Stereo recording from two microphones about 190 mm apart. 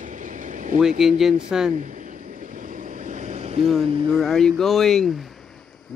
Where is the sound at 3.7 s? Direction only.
Centre (ahead or behind).